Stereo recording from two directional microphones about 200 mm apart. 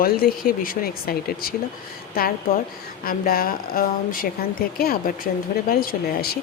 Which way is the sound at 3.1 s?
45° left (ahead or behind).